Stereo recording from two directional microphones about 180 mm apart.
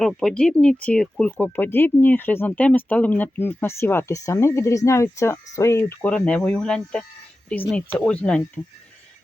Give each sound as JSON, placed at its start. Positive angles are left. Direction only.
{"t": 0.0, "sound": "speech", "side_deg": 0}